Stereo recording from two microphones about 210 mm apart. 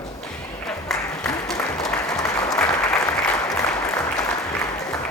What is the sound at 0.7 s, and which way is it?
Applause, 5° left (ahead or behind).